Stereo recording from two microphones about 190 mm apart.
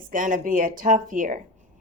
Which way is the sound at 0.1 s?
45° right (ahead or behind).